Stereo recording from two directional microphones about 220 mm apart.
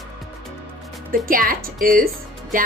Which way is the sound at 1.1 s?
40° right (ahead or behind).